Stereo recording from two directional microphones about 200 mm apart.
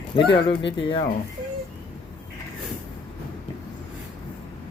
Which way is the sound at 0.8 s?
25° left (ahead or behind).